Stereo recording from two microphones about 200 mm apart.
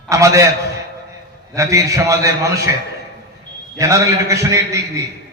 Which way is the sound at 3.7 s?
15° right (ahead or behind).